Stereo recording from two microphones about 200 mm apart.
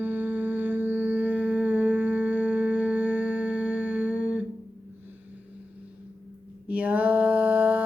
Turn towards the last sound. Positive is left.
turn(degrees=-10)  # may be behind; listen again after turning